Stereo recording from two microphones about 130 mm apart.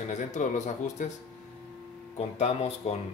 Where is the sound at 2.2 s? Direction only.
55° left (ahead or behind).